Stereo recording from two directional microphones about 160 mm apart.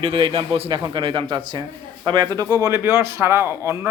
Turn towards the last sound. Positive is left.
turn(degrees=-15)  # may be behind; listen again after turning